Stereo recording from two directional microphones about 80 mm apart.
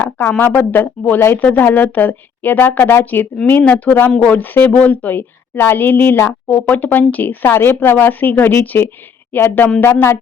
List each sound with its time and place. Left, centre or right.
0.3 s a woman's voice: left